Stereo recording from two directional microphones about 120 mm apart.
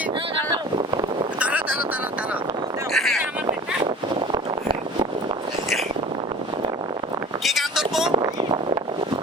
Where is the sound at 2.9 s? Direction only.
Centre (ahead or behind).